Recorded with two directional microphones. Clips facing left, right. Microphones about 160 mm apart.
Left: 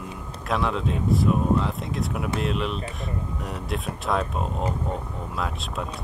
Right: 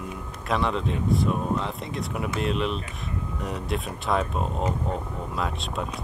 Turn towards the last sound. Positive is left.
turn(degrees=0)  # may be behind; listen again after turning